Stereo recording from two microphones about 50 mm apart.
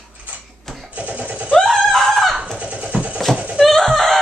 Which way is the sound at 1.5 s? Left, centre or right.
Centre.